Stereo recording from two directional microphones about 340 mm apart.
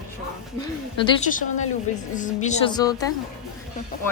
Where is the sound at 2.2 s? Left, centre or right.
Left.